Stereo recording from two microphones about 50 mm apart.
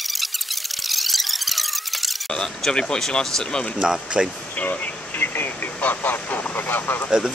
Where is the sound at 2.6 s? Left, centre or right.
Centre.